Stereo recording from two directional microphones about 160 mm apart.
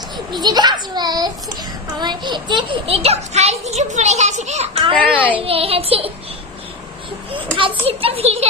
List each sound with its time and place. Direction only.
0.4 s a child's voice: 25° right (ahead or behind)
7.3 s a child's voice: 35° right (ahead or behind)